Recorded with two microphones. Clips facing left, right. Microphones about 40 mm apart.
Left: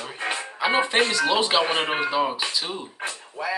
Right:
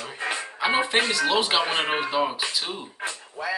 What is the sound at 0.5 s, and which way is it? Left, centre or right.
Speech, centre.